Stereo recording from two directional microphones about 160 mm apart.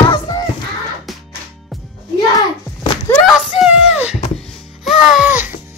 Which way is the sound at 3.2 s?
Centre (ahead or behind).